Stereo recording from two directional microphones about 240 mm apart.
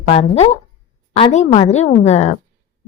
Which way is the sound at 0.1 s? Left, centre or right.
Left.